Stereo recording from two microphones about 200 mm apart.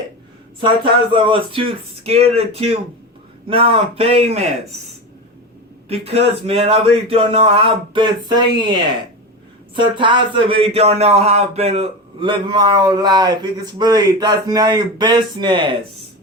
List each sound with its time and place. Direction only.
1.1 s speech: 25° right (ahead or behind)
5.9 s speech: 30° right (ahead or behind)
9.7 s speech: 25° right (ahead or behind)